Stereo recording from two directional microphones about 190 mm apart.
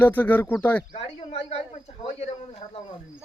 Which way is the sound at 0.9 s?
30° left (ahead or behind).